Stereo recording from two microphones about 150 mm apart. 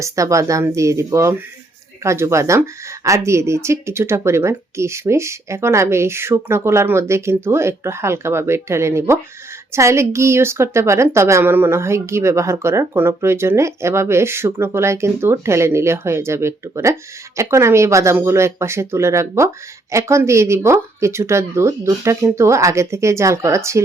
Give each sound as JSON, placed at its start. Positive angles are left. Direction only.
{"t": 0.0, "sound": "a woman's voice", "side_deg": -20}